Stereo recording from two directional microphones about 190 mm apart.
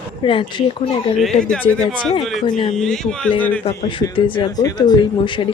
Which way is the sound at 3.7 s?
30° left (ahead or behind).